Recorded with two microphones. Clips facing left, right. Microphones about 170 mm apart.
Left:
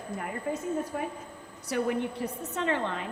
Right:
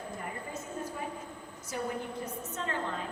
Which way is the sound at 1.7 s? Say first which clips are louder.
Left 7 dB; 75° left (ahead or behind).